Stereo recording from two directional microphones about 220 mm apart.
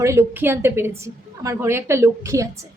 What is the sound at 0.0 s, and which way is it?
A woman's voice, 10° right (ahead or behind).